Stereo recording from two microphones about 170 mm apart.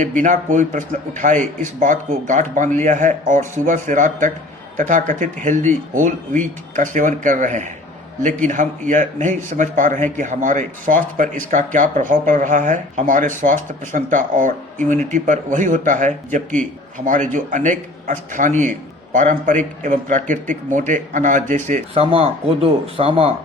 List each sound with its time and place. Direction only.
0.0 s a man's voice: 50° right (ahead or behind)
22.0 s speech: 35° right (ahead or behind)